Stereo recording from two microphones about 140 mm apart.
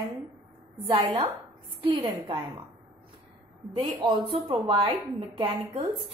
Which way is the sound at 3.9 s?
40° right (ahead or behind).